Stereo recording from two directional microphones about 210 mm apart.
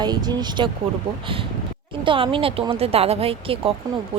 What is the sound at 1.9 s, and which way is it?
Speech, 25° right (ahead or behind).